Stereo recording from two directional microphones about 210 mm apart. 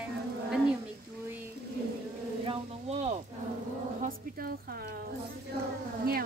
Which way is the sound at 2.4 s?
30° right (ahead or behind).